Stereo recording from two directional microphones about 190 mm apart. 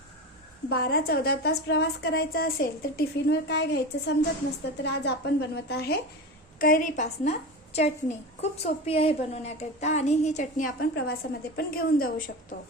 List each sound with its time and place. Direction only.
0.7 s a woman's voice: 55° left (ahead or behind)
6.6 s a woman's voice: 45° left (ahead or behind)
10.9 s a woman's voice: 55° left (ahead or behind)